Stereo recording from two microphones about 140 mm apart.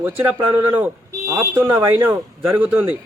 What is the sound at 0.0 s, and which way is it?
A man's voice, 15° right (ahead or behind).